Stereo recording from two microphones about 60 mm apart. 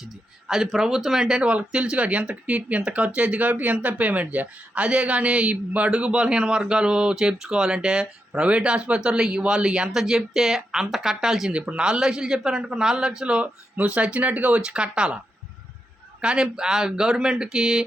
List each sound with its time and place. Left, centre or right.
0.0 s speech: centre
11.5 s speech: centre
16.2 s speech: centre